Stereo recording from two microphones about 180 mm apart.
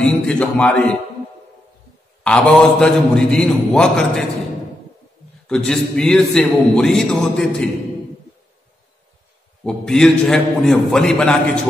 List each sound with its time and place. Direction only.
0.0 s speech: 5° left (ahead or behind)
2.2 s a man's voice: 5° left (ahead or behind)
5.7 s a man's voice: 5° left (ahead or behind)
9.7 s a man's voice: 5° left (ahead or behind)